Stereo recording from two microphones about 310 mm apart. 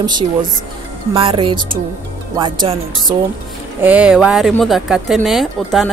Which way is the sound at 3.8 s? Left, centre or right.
Centre.